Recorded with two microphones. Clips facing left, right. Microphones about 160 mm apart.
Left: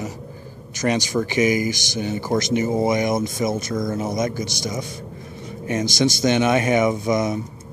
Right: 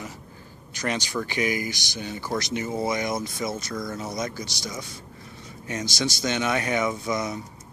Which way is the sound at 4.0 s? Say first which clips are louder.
Left 7 dB; 50° left (ahead or behind).